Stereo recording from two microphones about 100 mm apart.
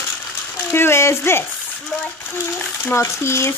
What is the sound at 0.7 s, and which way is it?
Speech, 25° left (ahead or behind).